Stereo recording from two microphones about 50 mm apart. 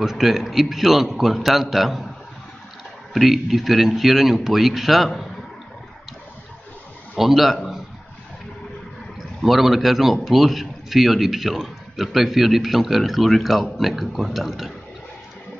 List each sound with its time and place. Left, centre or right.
0.0 s a man's voice: centre
3.1 s a man's voice: centre
7.2 s a man's voice: centre
9.2 s a man's voice: centre